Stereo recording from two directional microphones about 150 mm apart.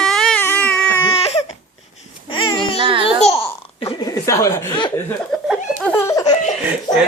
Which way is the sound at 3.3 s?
15° left (ahead or behind).